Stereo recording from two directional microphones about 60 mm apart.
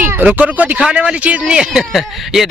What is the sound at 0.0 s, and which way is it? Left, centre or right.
Speech, right.